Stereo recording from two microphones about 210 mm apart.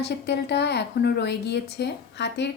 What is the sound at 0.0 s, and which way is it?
A woman's voice, 55° left (ahead or behind).